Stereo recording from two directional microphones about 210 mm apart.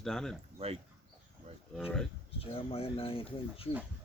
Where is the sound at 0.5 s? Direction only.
30° right (ahead or behind).